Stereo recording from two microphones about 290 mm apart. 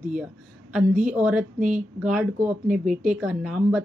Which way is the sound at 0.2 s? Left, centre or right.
Centre.